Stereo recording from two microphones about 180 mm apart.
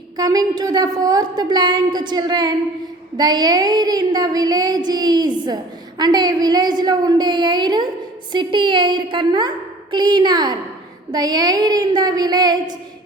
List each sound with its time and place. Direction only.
0.2 s a woman's voice: 20° right (ahead or behind)